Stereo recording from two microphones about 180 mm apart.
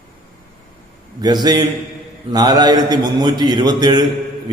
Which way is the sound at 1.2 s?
20° right (ahead or behind).